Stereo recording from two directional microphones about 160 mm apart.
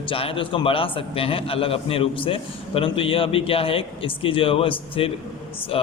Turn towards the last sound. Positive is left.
turn(degrees=35)  # may be behind; listen again after turning